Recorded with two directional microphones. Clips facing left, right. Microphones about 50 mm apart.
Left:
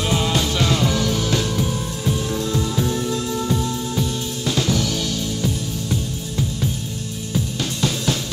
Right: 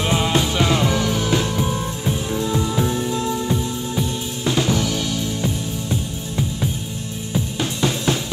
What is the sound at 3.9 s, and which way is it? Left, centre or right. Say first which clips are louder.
Music: even; right.